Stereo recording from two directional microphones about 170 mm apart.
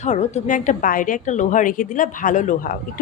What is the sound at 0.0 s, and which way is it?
A woman's voice, 40° left (ahead or behind).